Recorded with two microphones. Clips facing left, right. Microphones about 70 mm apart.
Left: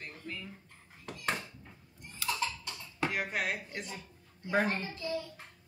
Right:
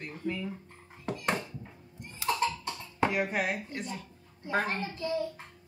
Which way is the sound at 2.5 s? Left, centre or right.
Right.